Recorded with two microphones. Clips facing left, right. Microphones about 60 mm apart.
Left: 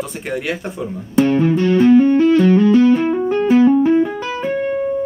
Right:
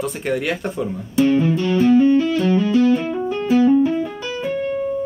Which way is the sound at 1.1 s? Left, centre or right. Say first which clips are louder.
Left 2 dB; left.